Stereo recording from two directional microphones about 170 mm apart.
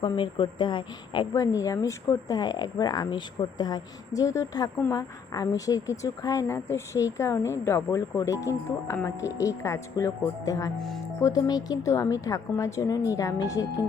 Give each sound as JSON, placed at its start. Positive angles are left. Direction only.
{"t": 0.0, "sound": "a woman's voice", "side_deg": 30}